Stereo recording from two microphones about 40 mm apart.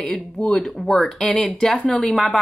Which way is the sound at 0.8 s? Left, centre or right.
Centre.